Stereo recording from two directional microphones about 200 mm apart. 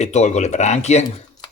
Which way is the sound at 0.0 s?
35° left (ahead or behind).